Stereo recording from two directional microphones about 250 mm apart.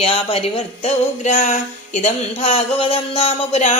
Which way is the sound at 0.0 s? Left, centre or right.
Left.